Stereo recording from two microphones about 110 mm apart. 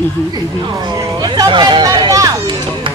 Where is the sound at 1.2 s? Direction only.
40° right (ahead or behind).